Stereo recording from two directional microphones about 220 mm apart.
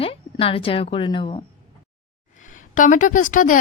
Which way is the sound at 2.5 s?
35° left (ahead or behind).